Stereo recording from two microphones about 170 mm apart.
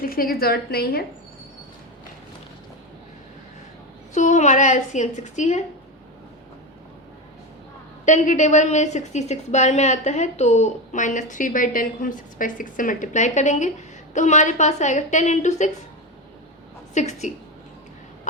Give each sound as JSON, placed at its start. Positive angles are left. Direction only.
{"t": 0.0, "sound": "a woman's voice", "side_deg": 60}
{"t": 4.1, "sound": "a woman's voice", "side_deg": 45}
{"t": 8.0, "sound": "a woman's voice", "side_deg": 45}
{"t": 16.9, "sound": "a woman's voice", "side_deg": 45}